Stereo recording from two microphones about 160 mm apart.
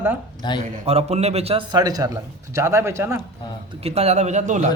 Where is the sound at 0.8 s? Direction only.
40° right (ahead or behind).